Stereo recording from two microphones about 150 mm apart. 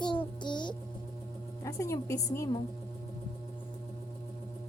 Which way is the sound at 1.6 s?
20° left (ahead or behind).